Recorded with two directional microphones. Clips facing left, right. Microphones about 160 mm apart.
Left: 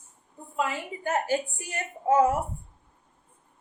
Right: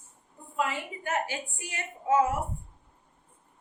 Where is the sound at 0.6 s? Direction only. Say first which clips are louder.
Left 1 dB; 30° left (ahead or behind).